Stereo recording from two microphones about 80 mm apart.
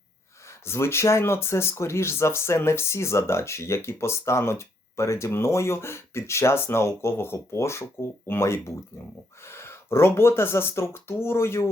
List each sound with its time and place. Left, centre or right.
0.6 s speech: left